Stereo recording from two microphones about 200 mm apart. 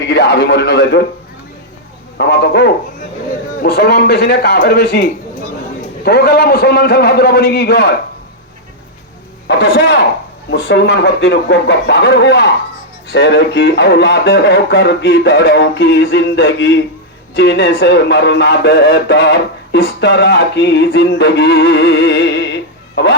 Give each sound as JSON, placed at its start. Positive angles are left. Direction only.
{"t": 0.1, "sound": "speech", "side_deg": 60}
{"t": 2.1, "sound": "a man's voice", "side_deg": 55}
{"t": 9.5, "sound": "speech", "side_deg": 55}